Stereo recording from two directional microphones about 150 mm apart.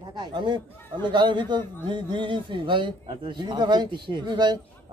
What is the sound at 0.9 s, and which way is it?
A man's voice, 30° right (ahead or behind).